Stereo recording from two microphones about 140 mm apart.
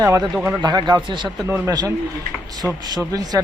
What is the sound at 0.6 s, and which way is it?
Speech, 30° right (ahead or behind).